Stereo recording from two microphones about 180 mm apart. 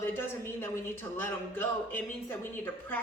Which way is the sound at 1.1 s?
10° left (ahead or behind).